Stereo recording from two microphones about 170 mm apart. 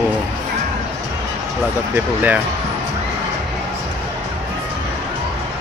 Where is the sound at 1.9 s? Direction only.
10° right (ahead or behind).